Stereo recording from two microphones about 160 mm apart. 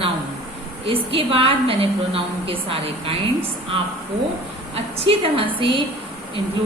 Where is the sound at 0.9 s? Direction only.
35° right (ahead or behind).